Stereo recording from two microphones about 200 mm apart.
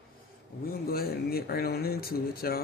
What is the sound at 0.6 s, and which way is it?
Speech, 50° left (ahead or behind).